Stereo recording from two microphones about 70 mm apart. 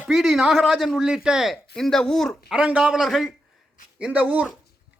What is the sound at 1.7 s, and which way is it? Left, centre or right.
Speech, centre.